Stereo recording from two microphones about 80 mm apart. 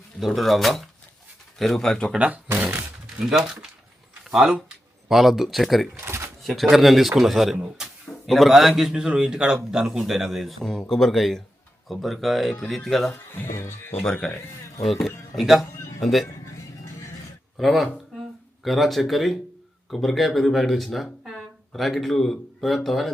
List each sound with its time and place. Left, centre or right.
0.2 s speech: centre
2.1 s a man's voice: centre
2.6 s a sound: centre
3.2 s speech: centre
5.9 s shuffling cards: right
6.4 s speech: centre
7.8 s a sound: centre
8.3 s a man's voice: centre
13.3 s speech: left
13.9 s speech: centre
17.6 s speech: centre